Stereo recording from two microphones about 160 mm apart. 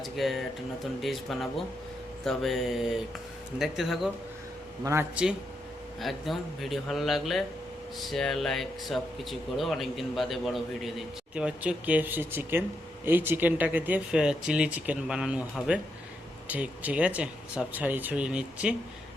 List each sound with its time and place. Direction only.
0.0 s a man's voice: centre (ahead or behind)
4.8 s speech: 15° right (ahead or behind)
6.0 s a man's voice: centre (ahead or behind)